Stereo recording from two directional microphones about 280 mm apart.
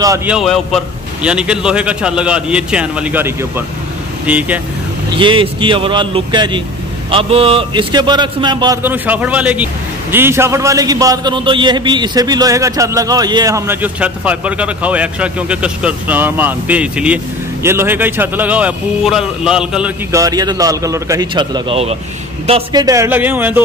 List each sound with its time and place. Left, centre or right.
0.0 s a man's voice: centre
5.1 s a man's voice: centre